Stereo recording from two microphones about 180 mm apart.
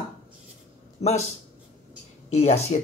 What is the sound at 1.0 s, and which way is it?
Speech, 40° left (ahead or behind).